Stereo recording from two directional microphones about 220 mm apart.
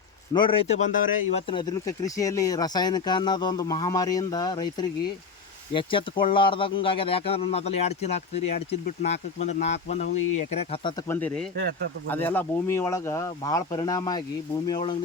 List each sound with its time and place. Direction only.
0.3 s speech: 25° left (ahead or behind)
1.5 s speech: 20° left (ahead or behind)
11.1 s speech: 5° left (ahead or behind)